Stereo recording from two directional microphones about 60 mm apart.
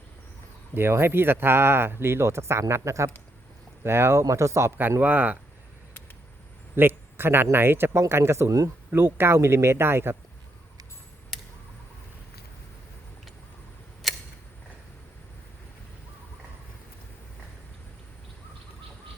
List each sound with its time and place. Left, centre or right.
0.7 s speech: right
4.8 s speech: right
6.7 s a sound: right
7.5 s speech: right
8.4 s speech: right
8.9 s speech: right
14.0 s a sound: centre